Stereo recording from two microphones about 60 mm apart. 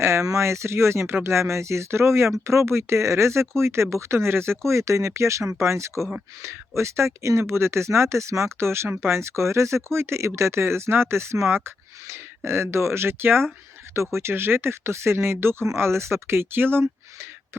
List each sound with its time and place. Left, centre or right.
0.0 s speech: right
13.9 s speech: right